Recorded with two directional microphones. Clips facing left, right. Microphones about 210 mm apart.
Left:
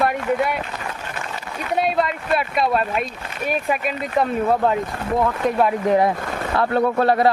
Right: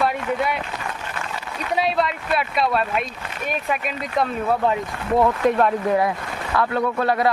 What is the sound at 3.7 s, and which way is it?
Speech, 5° left (ahead or behind).